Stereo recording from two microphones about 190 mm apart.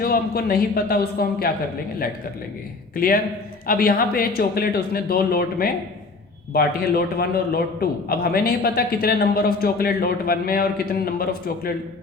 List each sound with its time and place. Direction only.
0.0 s speech: 50° left (ahead or behind)
2.9 s speech: 50° left (ahead or behind)
7.2 s speech: 55° left (ahead or behind)